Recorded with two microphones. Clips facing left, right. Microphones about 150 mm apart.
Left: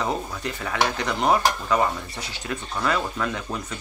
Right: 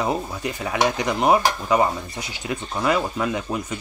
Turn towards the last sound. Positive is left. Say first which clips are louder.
# right 4 dB
turn(degrees=-15)  # may be behind; listen again after turning